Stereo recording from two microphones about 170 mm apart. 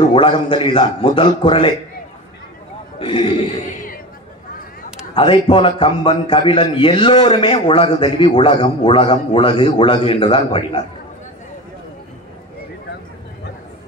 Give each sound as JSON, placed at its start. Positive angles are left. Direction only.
{"t": 0.1, "sound": "a man's voice", "side_deg": 30}
{"t": 3.0, "sound": "a man's voice", "side_deg": 30}
{"t": 5.1, "sound": "a man's voice", "side_deg": 30}